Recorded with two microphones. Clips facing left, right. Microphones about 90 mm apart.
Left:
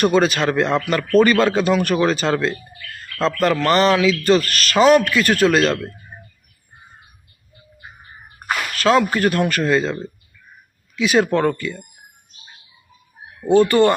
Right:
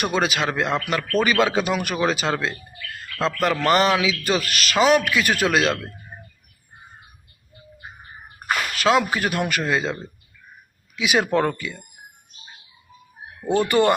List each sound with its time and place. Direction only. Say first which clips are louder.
0.0 s speech: left 6 dB; 5° right (ahead or behind)
8.8 s speech: left 4 dB; 10° right (ahead or behind)
13.6 s speech: left 4 dB; 15° right (ahead or behind)